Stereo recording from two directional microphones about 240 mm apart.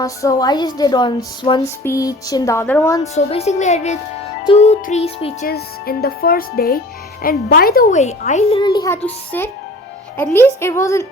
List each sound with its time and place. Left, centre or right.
0.0 s a woman's voice: centre
3.2 s music: left
5.5 s a woman's voice: left; by 11.0 s centre